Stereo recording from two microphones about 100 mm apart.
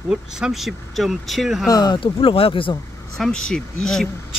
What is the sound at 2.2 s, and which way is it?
Speech, 70° left (ahead or behind).